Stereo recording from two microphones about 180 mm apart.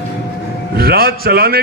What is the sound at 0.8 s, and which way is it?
Speech, 60° right (ahead or behind).